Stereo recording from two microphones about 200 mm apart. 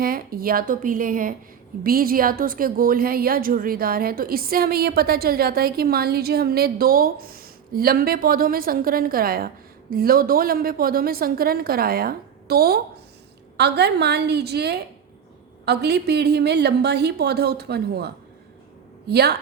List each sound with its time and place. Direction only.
0.0 s a woman's voice: 45° right (ahead or behind)